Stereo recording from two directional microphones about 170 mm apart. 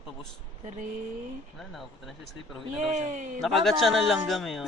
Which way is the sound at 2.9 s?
45° right (ahead or behind).